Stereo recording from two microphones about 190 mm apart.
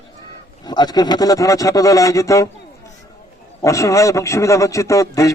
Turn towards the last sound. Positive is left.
turn(degrees=15)  # may be behind; listen again after turning